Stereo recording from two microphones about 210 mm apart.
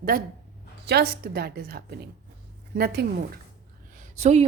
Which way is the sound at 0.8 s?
50° right (ahead or behind).